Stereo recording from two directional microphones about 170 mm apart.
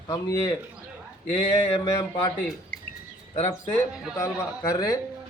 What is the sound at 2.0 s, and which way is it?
Speech, 25° left (ahead or behind).